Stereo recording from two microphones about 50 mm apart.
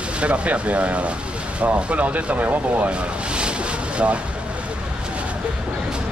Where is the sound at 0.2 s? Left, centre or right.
Right.